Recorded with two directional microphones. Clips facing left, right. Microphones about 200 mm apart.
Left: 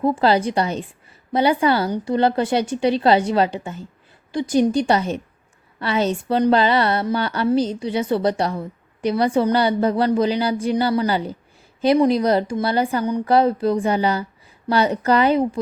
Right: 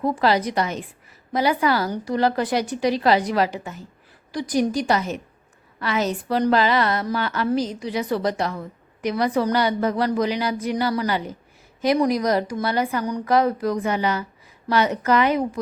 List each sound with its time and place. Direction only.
0.0 s a woman's voice: 30° left (ahead or behind)